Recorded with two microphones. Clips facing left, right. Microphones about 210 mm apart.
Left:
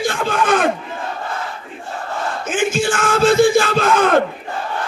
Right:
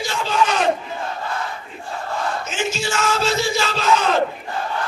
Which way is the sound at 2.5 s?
50° left (ahead or behind).